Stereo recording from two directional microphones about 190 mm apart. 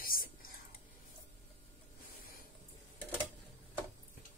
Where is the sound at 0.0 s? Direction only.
50° left (ahead or behind).